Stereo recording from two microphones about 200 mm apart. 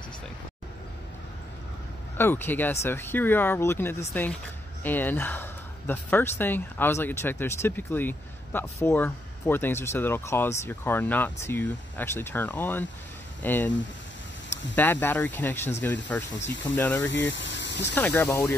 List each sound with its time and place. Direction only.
2.1 s speech: 10° left (ahead or behind)
14.8 s speech: 10° left (ahead or behind)
17.3 s speech: 65° left (ahead or behind)
17.9 s speech: 10° left (ahead or behind)